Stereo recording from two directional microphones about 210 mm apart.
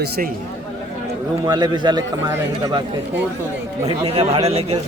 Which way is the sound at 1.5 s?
20° right (ahead or behind).